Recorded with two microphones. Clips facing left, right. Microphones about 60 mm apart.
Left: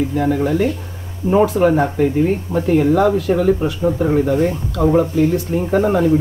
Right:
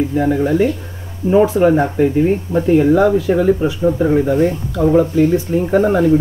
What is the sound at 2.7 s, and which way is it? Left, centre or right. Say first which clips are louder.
Speech: right 2 dB; right.